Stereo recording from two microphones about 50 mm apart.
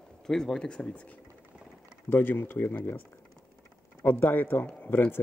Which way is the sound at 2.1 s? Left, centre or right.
Left.